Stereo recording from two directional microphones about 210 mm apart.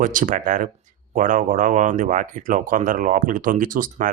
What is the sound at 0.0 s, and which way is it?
Speech, 40° right (ahead or behind).